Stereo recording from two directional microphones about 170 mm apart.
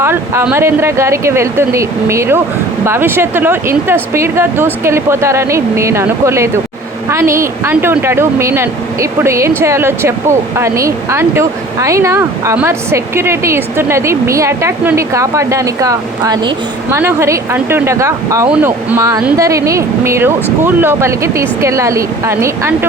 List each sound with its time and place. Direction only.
0.0 s a woman's voice: 15° right (ahead or behind)